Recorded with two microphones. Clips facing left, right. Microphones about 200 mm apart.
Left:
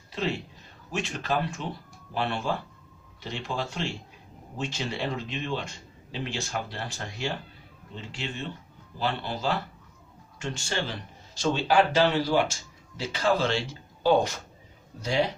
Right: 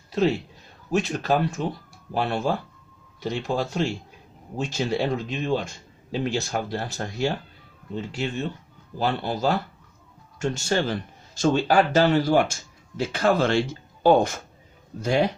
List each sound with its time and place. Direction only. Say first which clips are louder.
0.9 s speech: right 7 dB; 40° right (ahead or behind)